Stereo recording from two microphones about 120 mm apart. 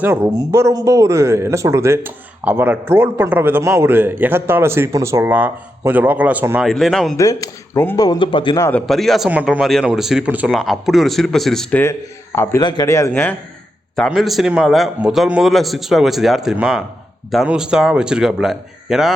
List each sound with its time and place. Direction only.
0.0 s speech: 20° right (ahead or behind)
6.6 s a man's voice: centre (ahead or behind)
7.2 s a man's voice: 30° left (ahead or behind)
8.2 s speech: 45° left (ahead or behind)
8.9 s a man's voice: centre (ahead or behind)
9.3 s a man's voice: 10° right (ahead or behind)
11.8 s a man's voice: 20° left (ahead or behind)
12.5 s a man's voice: 35° left (ahead or behind)
12.9 s a man's voice: 20° left (ahead or behind)
14.1 s a man's voice: centre (ahead or behind)